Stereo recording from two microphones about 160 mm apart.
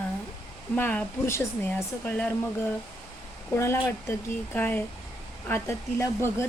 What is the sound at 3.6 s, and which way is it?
Speech, 15° left (ahead or behind).